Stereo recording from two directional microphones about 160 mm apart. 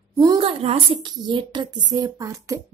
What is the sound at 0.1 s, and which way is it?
A woman's voice, 25° right (ahead or behind).